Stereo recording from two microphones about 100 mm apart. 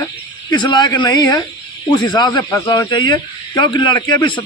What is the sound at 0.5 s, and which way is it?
Speech, 45° left (ahead or behind).